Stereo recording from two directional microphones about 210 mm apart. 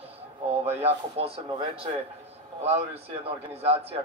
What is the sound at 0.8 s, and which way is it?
A man's voice, 30° right (ahead or behind).